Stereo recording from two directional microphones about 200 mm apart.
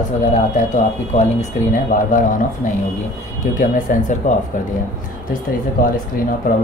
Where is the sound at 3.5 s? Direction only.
40° left (ahead or behind).